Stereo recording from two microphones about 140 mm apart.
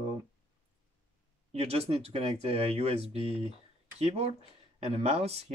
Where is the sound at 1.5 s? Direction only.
50° right (ahead or behind).